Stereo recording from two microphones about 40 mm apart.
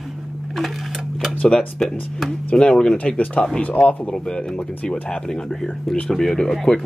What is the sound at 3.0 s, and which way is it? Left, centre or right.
Speech, left.